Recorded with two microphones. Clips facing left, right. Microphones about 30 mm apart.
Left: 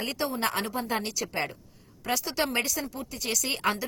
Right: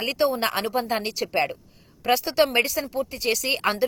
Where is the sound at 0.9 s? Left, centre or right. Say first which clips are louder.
Right 4 dB; right.